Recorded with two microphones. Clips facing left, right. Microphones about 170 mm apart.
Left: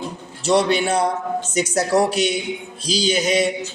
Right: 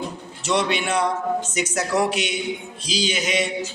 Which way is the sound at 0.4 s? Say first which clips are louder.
Left 5 dB; 35° left (ahead or behind).